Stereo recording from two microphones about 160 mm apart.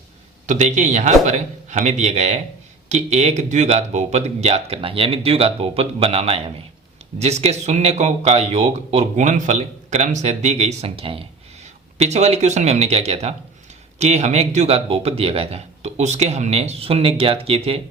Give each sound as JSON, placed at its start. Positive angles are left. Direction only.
{"t": 0.4, "sound": "a man's voice", "side_deg": -50}